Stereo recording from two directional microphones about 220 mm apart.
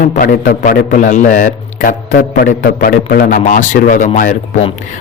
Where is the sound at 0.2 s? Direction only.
40° left (ahead or behind).